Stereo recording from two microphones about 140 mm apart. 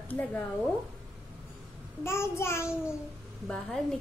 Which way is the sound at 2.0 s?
20° left (ahead or behind).